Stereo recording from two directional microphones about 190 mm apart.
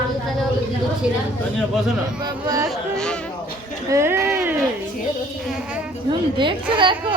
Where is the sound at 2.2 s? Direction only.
20° right (ahead or behind).